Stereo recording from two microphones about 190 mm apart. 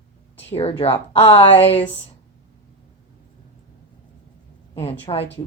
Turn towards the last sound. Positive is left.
turn(degrees=30)  # may be behind; listen again after turning